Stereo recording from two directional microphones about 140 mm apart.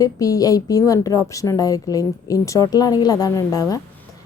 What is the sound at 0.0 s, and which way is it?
Speech, 25° left (ahead or behind).